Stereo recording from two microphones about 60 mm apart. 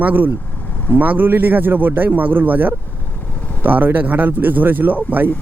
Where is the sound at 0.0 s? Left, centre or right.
Right.